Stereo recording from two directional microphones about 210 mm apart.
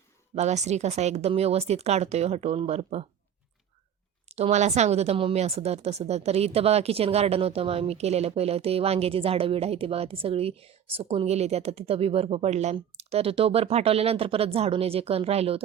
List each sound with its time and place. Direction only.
0.3 s speech: 30° right (ahead or behind)
4.3 s speech: 30° right (ahead or behind)